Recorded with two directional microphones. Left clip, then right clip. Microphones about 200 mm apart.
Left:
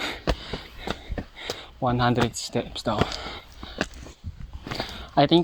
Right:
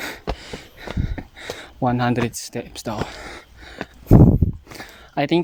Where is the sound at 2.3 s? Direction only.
75° right (ahead or behind).